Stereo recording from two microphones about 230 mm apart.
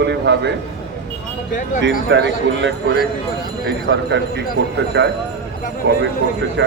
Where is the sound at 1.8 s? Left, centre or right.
Right.